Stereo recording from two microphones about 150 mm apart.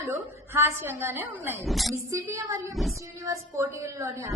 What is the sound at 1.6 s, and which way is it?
Speech, centre (ahead or behind).